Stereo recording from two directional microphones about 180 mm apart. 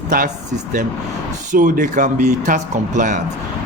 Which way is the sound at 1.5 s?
45° right (ahead or behind).